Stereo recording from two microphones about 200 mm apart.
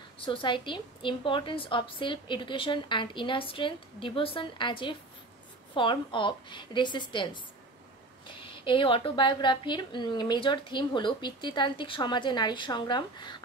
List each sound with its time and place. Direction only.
0.2 s a woman's voice: 25° left (ahead or behind)
8.4 s a woman's voice: 25° left (ahead or behind)